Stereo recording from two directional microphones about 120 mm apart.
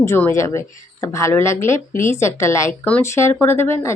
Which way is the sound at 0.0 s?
25° left (ahead or behind).